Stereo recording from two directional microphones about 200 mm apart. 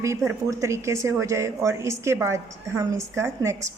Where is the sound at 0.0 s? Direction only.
15° right (ahead or behind).